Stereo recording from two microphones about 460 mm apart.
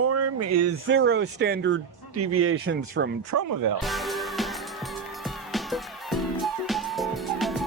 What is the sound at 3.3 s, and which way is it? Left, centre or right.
Speech, right.